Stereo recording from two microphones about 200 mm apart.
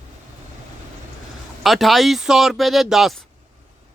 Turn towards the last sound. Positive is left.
turn(degrees=0)  # may be behind; listen again after turning